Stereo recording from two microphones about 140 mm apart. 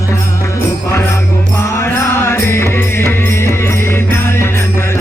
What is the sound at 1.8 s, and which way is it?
Music, 15° left (ahead or behind).